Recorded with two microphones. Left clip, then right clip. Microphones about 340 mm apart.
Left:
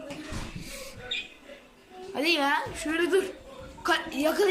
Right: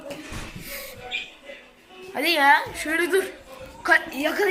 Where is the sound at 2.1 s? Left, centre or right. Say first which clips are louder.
Right 7 dB; centre.